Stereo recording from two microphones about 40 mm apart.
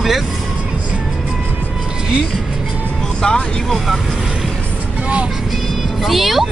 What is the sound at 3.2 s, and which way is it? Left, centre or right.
Speech, centre.